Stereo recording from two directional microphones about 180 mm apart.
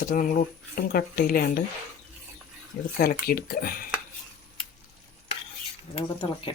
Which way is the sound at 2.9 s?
55° left (ahead or behind).